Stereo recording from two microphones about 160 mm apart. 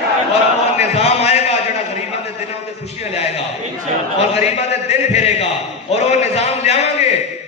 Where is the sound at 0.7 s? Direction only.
40° left (ahead or behind).